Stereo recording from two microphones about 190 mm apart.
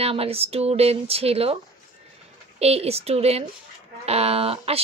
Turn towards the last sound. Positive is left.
turn(degrees=-30)  # may be behind; listen again after turning